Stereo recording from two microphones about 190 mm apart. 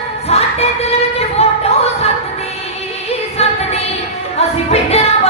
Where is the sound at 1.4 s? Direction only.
35° left (ahead or behind).